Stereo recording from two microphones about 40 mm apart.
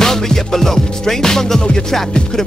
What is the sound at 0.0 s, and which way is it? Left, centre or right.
Music, centre.